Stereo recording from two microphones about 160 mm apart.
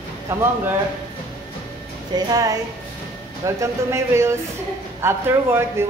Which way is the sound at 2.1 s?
25° right (ahead or behind).